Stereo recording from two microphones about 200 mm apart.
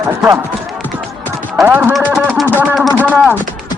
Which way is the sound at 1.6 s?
10° right (ahead or behind).